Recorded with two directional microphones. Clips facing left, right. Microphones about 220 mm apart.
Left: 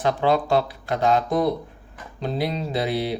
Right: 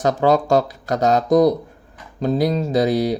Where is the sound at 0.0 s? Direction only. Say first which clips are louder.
Right 4 dB; 45° right (ahead or behind).